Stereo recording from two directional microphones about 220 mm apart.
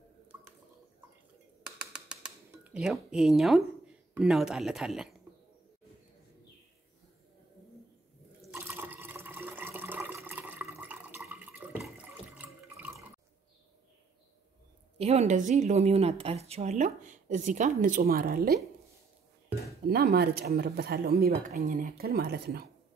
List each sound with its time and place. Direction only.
1.9 s music: 5° right (ahead or behind)
8.4 s water: 10° right (ahead or behind)
15.0 s a woman's voice: 30° right (ahead or behind)
19.9 s speech: 45° right (ahead or behind)